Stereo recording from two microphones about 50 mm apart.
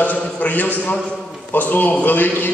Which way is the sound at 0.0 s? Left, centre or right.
Left.